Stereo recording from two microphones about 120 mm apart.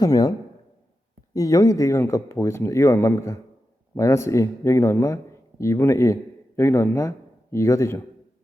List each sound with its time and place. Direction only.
0.0 s speech: 30° left (ahead or behind)